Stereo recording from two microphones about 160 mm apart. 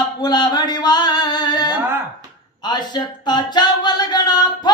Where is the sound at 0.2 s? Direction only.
25° left (ahead or behind).